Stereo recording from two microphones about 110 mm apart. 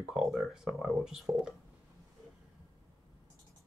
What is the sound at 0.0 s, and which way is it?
Speech, 5° right (ahead or behind).